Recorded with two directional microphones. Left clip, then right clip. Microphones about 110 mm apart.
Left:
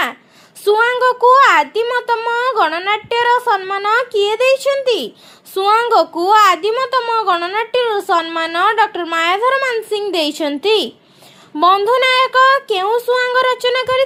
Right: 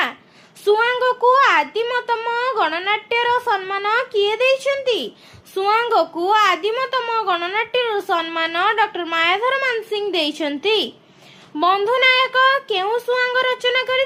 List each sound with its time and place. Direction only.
0.6 s a child's voice: 55° left (ahead or behind)
11.5 s a child's voice: 50° left (ahead or behind)